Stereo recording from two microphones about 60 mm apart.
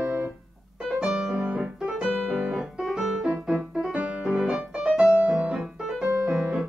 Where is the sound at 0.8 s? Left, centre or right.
Centre.